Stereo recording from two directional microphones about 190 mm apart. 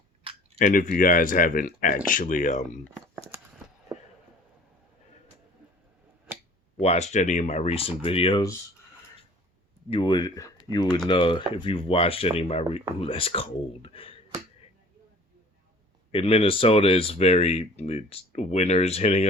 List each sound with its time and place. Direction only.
0.6 s speech: 45° left (ahead or behind)
3.3 s a sound: 10° right (ahead or behind)
6.7 s speech: 35° left (ahead or behind)
9.9 s speech: 20° left (ahead or behind)
16.1 s speech: 30° left (ahead or behind)